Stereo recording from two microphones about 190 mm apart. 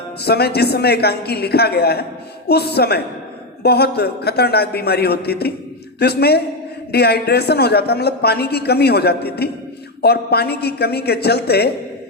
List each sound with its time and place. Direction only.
0.2 s a woman's voice: 55° left (ahead or behind)